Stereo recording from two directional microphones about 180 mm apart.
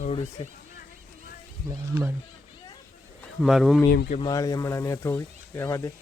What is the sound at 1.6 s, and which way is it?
Speech, 10° right (ahead or behind).